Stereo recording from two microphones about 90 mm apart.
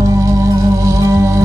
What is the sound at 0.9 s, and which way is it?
Music, 35° right (ahead or behind).